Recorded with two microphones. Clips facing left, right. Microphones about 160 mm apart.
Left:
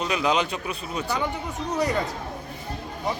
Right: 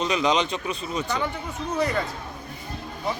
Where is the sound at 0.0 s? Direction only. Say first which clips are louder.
Right 1 dB; 5° left (ahead or behind).